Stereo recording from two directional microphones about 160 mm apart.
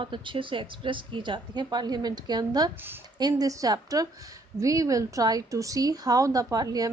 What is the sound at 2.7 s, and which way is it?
A woman's voice, 15° right (ahead or behind).